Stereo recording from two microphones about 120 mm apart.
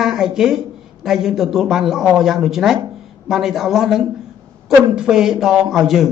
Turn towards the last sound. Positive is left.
turn(degrees=0)  # may be behind; listen again after turning